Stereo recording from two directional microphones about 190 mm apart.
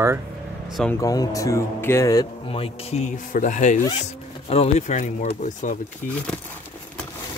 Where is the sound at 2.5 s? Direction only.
30° left (ahead or behind); by 6.2 s 45° left (ahead or behind).